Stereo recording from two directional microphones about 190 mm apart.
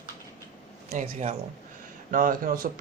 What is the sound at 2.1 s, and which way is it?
Speech, 45° right (ahead or behind).